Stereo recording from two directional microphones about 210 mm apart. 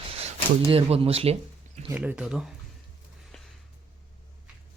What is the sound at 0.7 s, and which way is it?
Speech, 30° right (ahead or behind).